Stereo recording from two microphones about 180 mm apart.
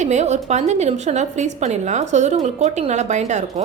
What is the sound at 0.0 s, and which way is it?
A woman's voice, 40° right (ahead or behind).